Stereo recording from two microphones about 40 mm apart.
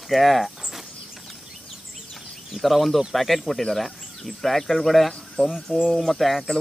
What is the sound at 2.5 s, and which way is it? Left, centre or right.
Speech, centre.